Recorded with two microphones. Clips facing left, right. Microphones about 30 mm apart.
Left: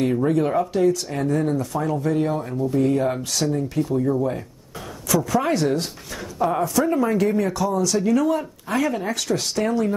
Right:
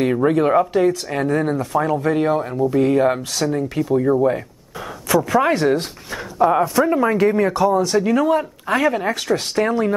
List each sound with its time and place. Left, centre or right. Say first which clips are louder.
0.0 s speech: right 4 dB; right
2.5 s speech: right 4 dB; right
2.8 s speech: right 4 dB; right